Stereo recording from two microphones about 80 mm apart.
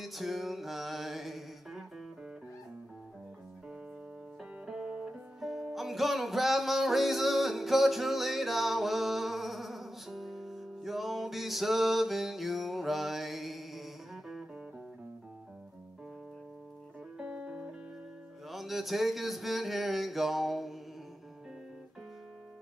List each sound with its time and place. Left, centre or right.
0.0 s music: centre
4.6 s music: centre
17.2 s music: centre
18.5 s a sound: centre